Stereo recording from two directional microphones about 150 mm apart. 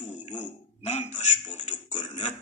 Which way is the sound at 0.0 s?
50° left (ahead or behind).